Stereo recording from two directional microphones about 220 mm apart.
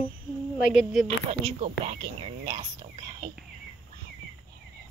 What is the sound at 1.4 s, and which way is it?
Speech, 25° right (ahead or behind).